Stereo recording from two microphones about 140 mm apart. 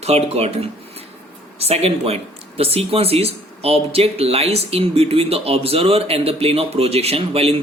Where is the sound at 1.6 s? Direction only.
45° right (ahead or behind).